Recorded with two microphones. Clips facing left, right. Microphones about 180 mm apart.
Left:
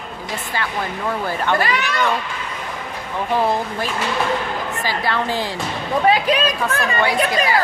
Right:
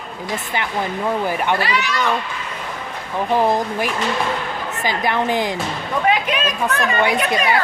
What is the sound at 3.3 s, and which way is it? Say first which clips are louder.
Speech: right 2 dB; 15° right (ahead or behind).